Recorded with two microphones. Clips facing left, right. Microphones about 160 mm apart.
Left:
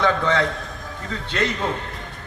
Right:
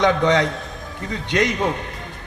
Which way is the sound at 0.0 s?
20° right (ahead or behind).